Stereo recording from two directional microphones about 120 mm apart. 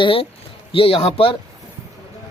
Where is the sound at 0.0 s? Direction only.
50° left (ahead or behind).